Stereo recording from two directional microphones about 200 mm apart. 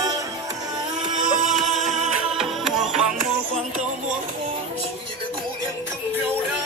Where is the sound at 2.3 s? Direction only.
Centre (ahead or behind).